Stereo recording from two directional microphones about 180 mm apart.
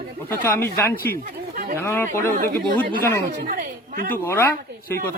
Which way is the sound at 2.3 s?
60° right (ahead or behind).